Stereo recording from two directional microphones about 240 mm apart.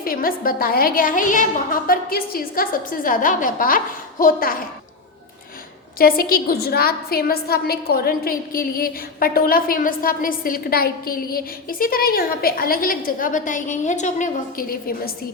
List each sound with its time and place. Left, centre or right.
0.0 s a woman's voice: left
6.0 s a woman's voice: left